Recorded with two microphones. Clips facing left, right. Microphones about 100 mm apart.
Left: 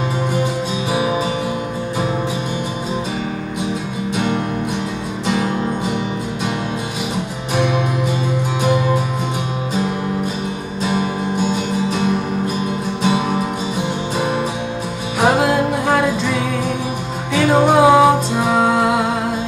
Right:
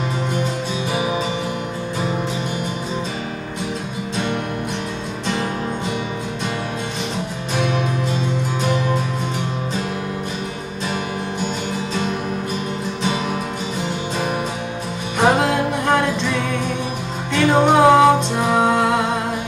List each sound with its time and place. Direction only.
7.5 s music: 15° left (ahead or behind)
10.8 s music: 20° left (ahead or behind)
13.0 s music: 15° left (ahead or behind)
15.1 s music: 5° left (ahead or behind)